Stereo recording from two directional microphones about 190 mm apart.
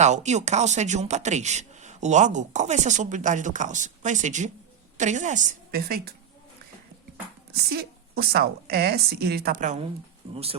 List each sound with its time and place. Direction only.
0.0 s speech: 35° right (ahead or behind); by 6.1 s 50° right (ahead or behind)
7.5 s a woman's voice: 55° right (ahead or behind)
10.3 s speech: 30° right (ahead or behind)